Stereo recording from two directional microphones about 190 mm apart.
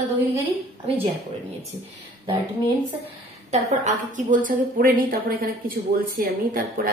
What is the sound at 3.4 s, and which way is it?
A woman's voice, 40° right (ahead or behind).